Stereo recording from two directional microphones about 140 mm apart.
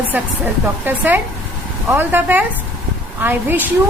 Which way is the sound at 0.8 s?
15° right (ahead or behind).